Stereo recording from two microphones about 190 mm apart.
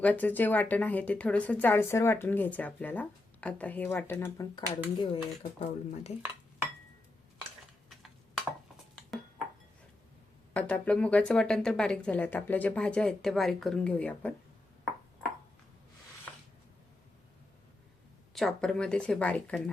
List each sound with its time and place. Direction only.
0.0 s a woman's voice: 10° left (ahead or behind)
4.9 s speech: 30° left (ahead or behind)
10.5 s a woman's voice: 5° left (ahead or behind)
18.3 s speech: centre (ahead or behind)